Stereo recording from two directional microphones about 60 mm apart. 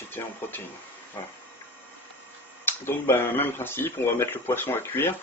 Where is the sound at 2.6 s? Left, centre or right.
Left.